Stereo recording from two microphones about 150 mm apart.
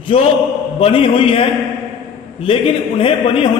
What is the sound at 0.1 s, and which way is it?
A man's voice, 35° left (ahead or behind).